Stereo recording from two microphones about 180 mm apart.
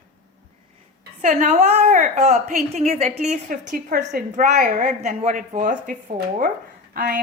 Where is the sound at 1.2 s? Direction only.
40° right (ahead or behind).